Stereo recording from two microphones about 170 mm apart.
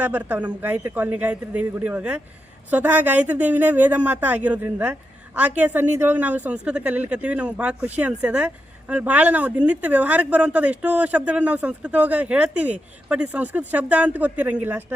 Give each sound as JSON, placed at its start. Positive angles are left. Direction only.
{"t": 0.0, "sound": "speech", "side_deg": -10}